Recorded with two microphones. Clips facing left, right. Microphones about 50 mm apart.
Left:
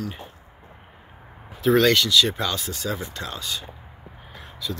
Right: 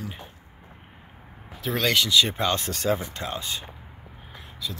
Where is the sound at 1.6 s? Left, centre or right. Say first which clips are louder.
Left 6 dB; centre.